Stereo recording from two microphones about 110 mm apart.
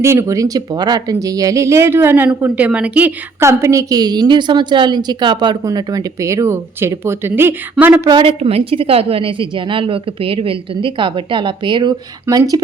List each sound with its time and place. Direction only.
0.0 s speech: 25° right (ahead or behind)
3.4 s a woman's voice: 25° right (ahead or behind)
8.4 s a woman's voice: 65° right (ahead or behind); by 11.9 s 45° right (ahead or behind)
12.2 s a woman's voice: 35° right (ahead or behind)